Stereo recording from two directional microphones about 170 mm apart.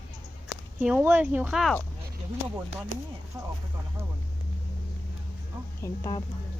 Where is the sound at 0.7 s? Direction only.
10° right (ahead or behind).